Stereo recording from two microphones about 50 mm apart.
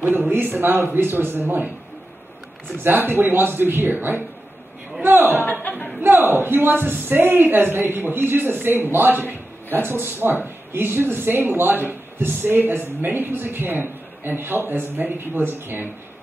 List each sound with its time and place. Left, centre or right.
0.3 s a man's voice: right
2.8 s a man's voice: right
5.4 s speech: left
5.9 s a man's voice: right